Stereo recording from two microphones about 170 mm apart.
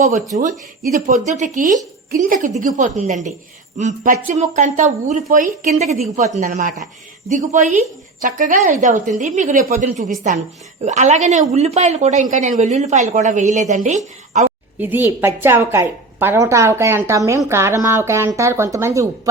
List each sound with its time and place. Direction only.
0.8 s speech: 50° right (ahead or behind)
14.8 s a woman's voice: 10° right (ahead or behind)